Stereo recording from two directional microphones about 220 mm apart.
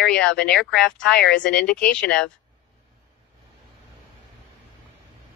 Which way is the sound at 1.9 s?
5° left (ahead or behind).